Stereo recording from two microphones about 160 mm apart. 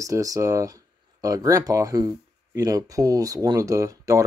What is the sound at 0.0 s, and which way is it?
Speech, 20° right (ahead or behind).